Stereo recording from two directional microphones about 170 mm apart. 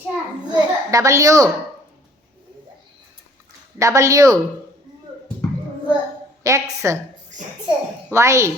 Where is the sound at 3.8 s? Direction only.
20° right (ahead or behind).